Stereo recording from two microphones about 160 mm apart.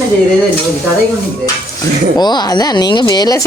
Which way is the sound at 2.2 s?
25° left (ahead or behind).